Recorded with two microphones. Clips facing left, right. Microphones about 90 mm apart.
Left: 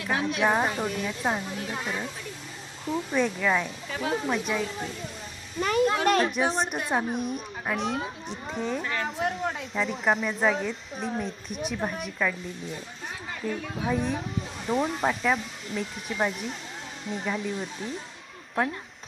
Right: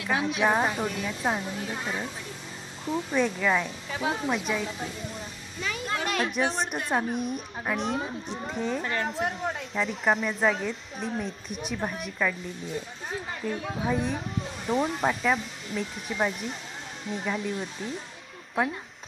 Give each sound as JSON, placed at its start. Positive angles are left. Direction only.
{"t": 0.0, "sound": "speech", "side_deg": 0}
{"t": 2.8, "sound": "speech", "side_deg": 0}
{"t": 5.5, "sound": "a woman's voice", "side_deg": 50}
{"t": 6.3, "sound": "speech", "side_deg": 0}
{"t": 8.8, "sound": "speech", "side_deg": -35}
{"t": 9.0, "sound": "speech", "side_deg": 0}
{"t": 13.8, "sound": "speech", "side_deg": 0}